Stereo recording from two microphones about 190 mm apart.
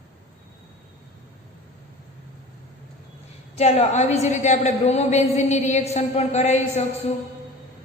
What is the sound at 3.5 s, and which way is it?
A woman's voice, 35° left (ahead or behind).